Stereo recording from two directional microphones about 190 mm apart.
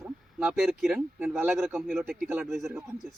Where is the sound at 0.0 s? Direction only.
5° right (ahead or behind).